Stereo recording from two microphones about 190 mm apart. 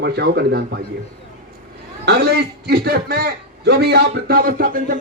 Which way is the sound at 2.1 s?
60° right (ahead or behind).